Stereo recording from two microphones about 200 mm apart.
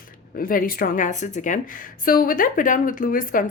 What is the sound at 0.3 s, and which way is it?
Speech, 45° left (ahead or behind).